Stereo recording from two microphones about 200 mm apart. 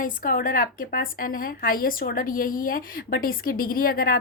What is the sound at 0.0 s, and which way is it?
A woman's voice, 45° left (ahead or behind).